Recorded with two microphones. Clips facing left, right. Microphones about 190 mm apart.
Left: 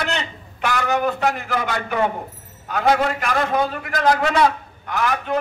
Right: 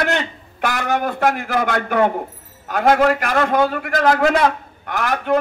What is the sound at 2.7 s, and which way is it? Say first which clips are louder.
A man's voice: right 4 dB; 55° right (ahead or behind).